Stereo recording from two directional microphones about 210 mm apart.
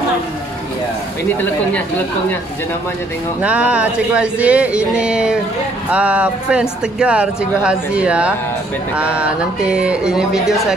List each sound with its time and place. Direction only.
3.4 s speech: 5° right (ahead or behind)